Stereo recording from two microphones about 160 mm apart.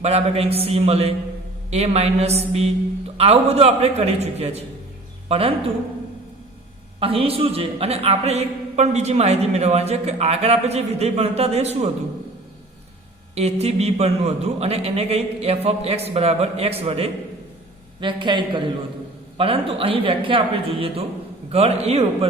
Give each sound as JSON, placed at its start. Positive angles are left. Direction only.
{"t": 0.0, "sound": "a man's voice", "side_deg": -40}
{"t": 7.0, "sound": "a man's voice", "side_deg": -35}
{"t": 13.3, "sound": "a man's voice", "side_deg": -40}